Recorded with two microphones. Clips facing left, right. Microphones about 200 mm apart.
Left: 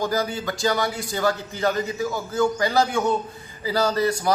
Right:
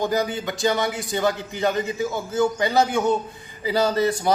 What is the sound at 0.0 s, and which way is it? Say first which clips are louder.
A man's voice: right 1 dB; 20° right (ahead or behind).